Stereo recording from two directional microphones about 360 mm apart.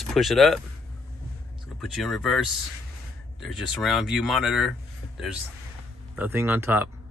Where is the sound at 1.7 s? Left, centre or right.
Centre.